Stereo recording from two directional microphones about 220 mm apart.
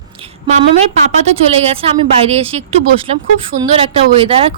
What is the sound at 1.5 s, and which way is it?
Speech, 25° right (ahead or behind).